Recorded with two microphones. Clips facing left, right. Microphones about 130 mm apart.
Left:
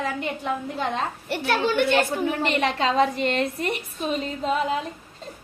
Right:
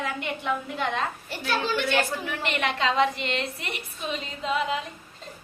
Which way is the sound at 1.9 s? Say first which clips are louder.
Left 5 dB; 30° left (ahead or behind).